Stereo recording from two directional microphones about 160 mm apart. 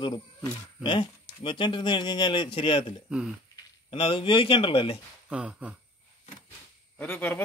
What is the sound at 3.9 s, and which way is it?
Speech, 35° left (ahead or behind).